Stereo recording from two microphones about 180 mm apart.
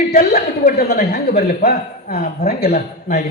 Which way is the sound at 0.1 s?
60° left (ahead or behind).